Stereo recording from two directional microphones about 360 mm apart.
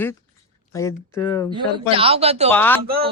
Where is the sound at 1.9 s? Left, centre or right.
Centre.